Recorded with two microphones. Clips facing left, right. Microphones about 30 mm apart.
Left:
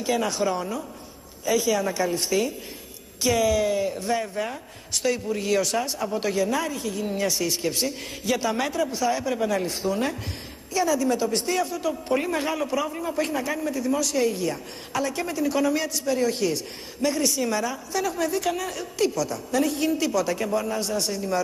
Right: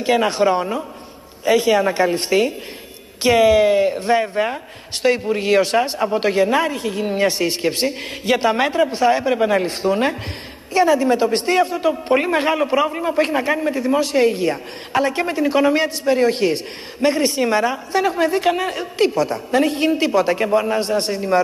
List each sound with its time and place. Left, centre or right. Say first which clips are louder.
0.0 s a woman's voice: right 8 dB; right